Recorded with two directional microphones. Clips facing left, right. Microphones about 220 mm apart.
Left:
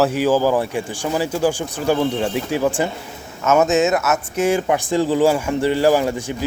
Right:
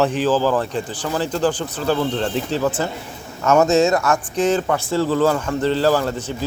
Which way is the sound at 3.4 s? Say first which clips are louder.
Right 1 dB; centre (ahead or behind).